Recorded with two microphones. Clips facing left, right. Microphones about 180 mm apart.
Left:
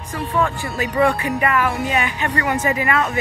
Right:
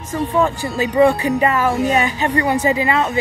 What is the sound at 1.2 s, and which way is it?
A woman's voice, 30° right (ahead or behind).